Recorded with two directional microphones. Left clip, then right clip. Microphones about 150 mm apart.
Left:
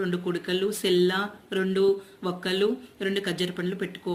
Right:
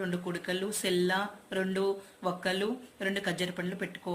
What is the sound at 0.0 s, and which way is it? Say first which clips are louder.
Speech: left 6 dB; 40° right (ahead or behind).